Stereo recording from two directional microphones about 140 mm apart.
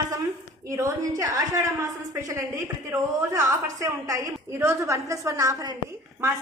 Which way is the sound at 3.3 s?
25° right (ahead or behind).